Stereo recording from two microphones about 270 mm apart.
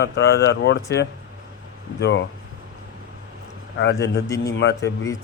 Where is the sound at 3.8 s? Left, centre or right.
Left.